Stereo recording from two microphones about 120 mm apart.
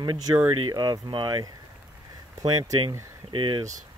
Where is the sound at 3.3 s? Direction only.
45° right (ahead or behind).